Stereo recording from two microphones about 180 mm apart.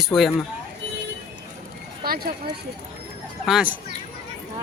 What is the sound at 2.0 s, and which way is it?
Speech, 55° right (ahead or behind).